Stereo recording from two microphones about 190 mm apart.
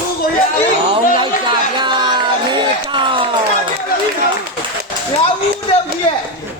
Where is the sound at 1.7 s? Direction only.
25° right (ahead or behind).